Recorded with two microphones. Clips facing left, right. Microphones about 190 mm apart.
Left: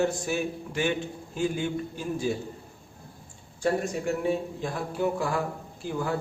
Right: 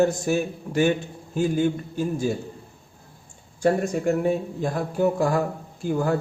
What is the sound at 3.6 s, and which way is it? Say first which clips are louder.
A man's voice: right 5 dB; 45° right (ahead or behind).